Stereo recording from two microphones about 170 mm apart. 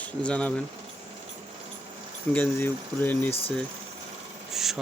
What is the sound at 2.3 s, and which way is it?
Speech, 10° left (ahead or behind).